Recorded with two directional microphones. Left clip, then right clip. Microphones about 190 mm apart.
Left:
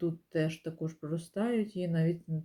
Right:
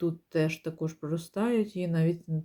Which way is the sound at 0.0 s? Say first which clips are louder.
Right 4 dB; 25° right (ahead or behind).